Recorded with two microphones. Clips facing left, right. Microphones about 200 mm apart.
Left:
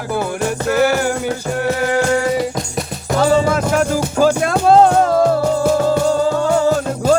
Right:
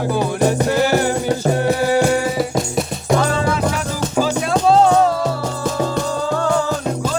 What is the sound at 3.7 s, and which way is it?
Music, 50° left (ahead or behind).